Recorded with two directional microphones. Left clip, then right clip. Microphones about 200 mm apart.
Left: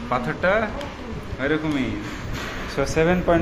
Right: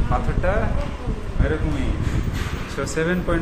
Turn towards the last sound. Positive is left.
turn(degrees=10)  # may be behind; listen again after turning